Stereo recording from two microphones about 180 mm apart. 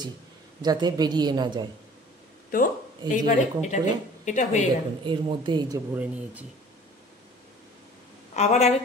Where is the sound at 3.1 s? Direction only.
40° left (ahead or behind).